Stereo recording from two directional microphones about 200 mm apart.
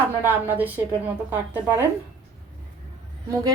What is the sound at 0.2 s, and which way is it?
Speech, 10° right (ahead or behind).